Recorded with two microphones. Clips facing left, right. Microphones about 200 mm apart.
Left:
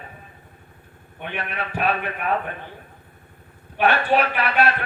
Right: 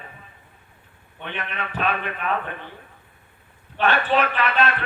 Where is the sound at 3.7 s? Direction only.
10° left (ahead or behind).